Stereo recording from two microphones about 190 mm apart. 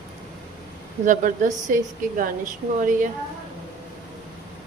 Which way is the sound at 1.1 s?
45° right (ahead or behind).